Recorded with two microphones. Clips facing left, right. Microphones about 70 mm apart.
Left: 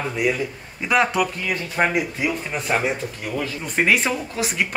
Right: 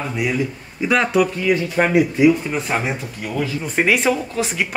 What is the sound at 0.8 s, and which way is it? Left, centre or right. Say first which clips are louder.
Speech: right 3 dB; centre.